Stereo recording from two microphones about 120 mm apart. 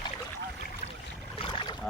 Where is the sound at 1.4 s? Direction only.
45° left (ahead or behind).